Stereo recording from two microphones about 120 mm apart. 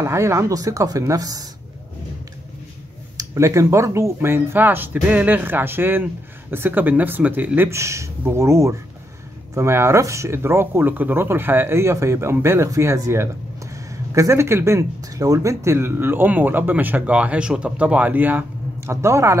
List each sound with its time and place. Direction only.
0.0 s speech: 25° right (ahead or behind)
3.2 s speech: 25° right (ahead or behind)